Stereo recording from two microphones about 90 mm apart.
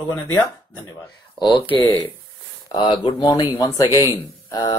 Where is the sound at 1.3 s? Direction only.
65° left (ahead or behind).